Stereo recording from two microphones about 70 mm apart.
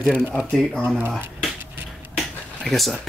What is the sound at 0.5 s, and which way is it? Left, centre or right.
Speech, centre.